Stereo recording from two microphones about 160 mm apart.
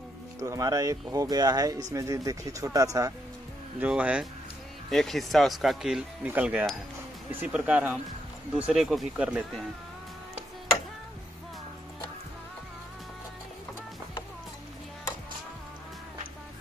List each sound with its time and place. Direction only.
0.4 s speech: 20° right (ahead or behind)
3.8 s speech: 10° right (ahead or behind)